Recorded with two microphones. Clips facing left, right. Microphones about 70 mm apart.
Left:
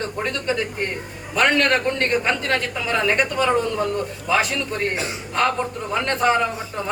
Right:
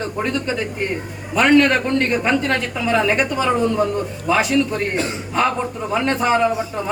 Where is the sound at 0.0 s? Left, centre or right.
Centre.